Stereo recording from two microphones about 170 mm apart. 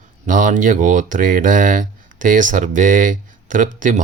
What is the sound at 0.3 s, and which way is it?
Speech, 50° right (ahead or behind).